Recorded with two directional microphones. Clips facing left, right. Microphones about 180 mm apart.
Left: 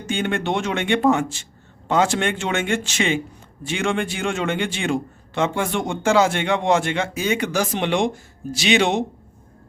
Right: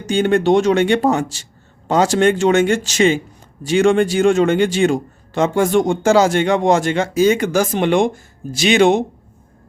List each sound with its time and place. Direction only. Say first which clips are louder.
0.1 s a man's voice: right 9 dB; 40° right (ahead or behind)